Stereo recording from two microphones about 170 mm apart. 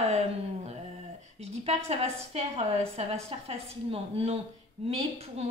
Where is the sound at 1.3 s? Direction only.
40° right (ahead or behind).